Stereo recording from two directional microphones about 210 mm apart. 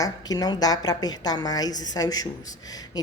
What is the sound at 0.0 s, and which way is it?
A woman's voice, 20° left (ahead or behind).